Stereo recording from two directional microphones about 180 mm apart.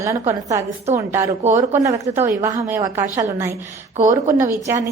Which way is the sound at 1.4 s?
40° right (ahead or behind).